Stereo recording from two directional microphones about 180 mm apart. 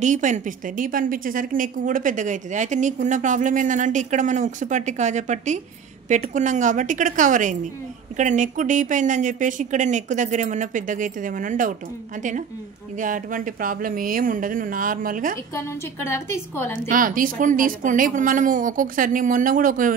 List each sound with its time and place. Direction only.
0.0 s a woman's voice: 45° right (ahead or behind)
15.5 s a woman's voice: 15° left (ahead or behind)
16.8 s a woman's voice: 50° right (ahead or behind)